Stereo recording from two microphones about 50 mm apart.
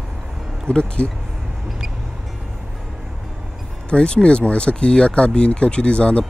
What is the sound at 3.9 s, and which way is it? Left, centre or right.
Speech, left.